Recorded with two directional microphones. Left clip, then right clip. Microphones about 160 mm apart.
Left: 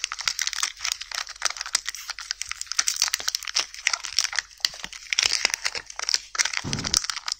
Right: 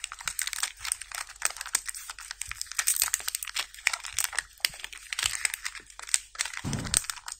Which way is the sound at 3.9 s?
15° left (ahead or behind).